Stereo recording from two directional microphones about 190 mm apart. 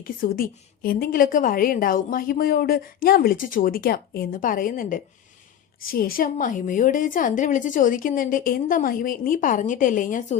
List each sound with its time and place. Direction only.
0.0 s a woman's voice: 50° left (ahead or behind)